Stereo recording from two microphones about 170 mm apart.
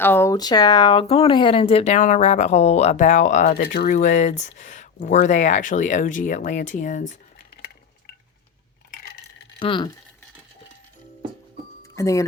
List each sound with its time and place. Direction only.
0.0 s speech: 15° left (ahead or behind); by 3.5 s 45° left (ahead or behind)
3.5 s speech: 65° left (ahead or behind)
3.9 s speech: 45° left (ahead or behind)
9.6 s speech: 30° left (ahead or behind)
11.8 s music: 20° left (ahead or behind)